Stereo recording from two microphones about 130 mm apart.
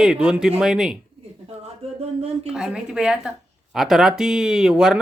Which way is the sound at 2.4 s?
5° right (ahead or behind).